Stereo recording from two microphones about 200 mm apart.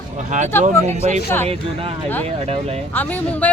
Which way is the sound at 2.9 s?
5° left (ahead or behind).